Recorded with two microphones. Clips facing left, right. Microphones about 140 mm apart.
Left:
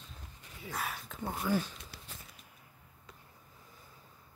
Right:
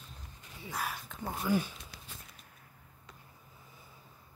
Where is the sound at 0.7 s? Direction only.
Centre (ahead or behind).